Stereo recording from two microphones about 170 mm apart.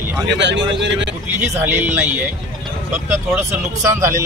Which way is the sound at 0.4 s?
90° right.